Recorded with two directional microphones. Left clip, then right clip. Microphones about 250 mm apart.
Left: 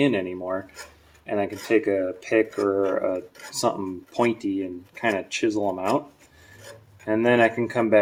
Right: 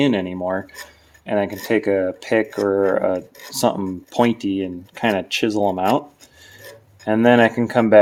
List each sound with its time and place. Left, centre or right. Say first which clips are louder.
0.0 s speech: right 4 dB; right
7.0 s speech: right 5 dB; right